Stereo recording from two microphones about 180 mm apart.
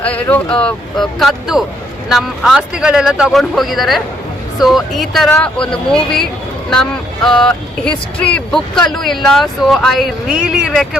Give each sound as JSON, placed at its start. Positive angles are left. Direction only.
{"t": 0.0, "sound": "speech", "side_deg": 10}